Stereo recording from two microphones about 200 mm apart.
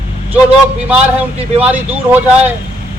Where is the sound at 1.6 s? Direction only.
10° right (ahead or behind).